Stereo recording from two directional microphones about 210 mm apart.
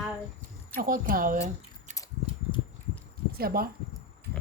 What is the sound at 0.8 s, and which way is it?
Speech, 40° right (ahead or behind).